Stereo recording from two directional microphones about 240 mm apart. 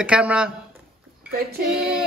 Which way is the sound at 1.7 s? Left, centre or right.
Centre.